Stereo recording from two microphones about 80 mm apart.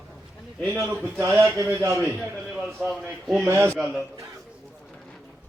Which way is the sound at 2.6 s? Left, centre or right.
Centre.